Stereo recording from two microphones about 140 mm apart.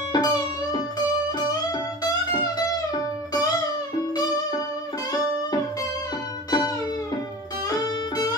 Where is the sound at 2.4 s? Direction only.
30° left (ahead or behind).